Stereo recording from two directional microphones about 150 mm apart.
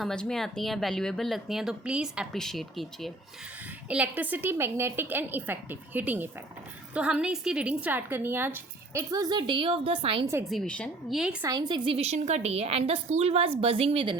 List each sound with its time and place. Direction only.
0.0 s speech: 5° left (ahead or behind)
3.8 s a woman's voice: 10° right (ahead or behind); by 10.2 s 35° right (ahead or behind)
10.5 s speech: 5° left (ahead or behind)
11.4 s a woman's voice: 25° right (ahead or behind)